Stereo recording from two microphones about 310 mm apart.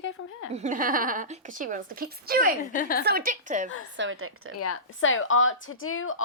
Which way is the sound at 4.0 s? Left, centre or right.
Right.